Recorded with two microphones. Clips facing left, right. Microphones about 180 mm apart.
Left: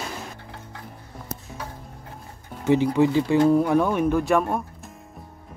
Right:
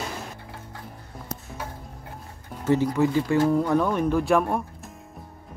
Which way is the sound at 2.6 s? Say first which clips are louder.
Left 2 dB; 15° left (ahead or behind).